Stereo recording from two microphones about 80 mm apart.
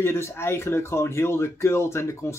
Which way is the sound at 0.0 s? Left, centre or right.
Left.